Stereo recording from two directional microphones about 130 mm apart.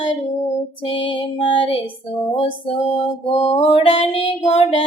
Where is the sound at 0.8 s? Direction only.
45° left (ahead or behind).